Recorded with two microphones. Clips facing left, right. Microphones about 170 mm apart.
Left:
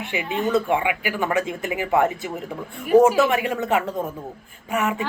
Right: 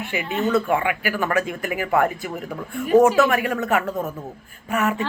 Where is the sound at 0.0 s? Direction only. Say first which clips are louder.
Right 1 dB; 15° left (ahead or behind).